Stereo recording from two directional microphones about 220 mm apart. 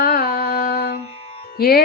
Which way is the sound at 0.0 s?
45° left (ahead or behind).